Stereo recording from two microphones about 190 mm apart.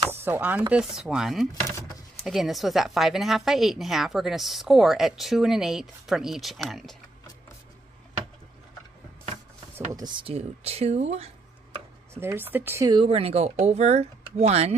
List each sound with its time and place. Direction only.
0.1 s speech: 10° right (ahead or behind)
9.9 s speech: 25° right (ahead or behind)
12.2 s speech: 10° right (ahead or behind); by 14.8 s 35° right (ahead or behind)